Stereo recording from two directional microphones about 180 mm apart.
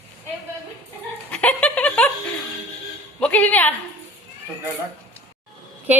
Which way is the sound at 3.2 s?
10° left (ahead or behind).